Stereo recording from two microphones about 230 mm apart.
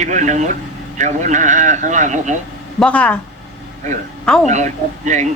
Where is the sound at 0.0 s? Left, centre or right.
Right.